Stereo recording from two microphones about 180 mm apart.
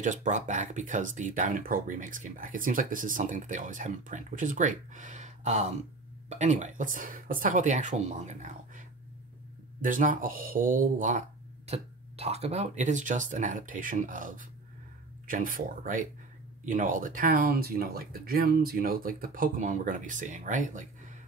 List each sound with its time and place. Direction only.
0.0 s speech: 45° right (ahead or behind)